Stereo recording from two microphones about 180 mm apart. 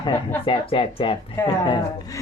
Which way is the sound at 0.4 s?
30° left (ahead or behind).